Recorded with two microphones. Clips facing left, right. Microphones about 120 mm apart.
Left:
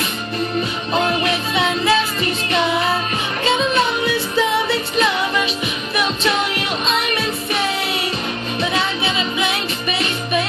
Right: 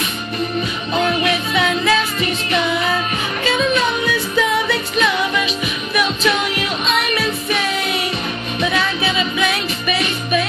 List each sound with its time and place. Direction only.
0.9 s music: 30° left (ahead or behind)
3.4 s music: 25° left (ahead or behind)
8.7 s music: 25° left (ahead or behind)